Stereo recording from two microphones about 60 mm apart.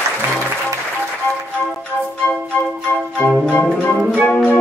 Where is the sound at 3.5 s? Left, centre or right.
Left.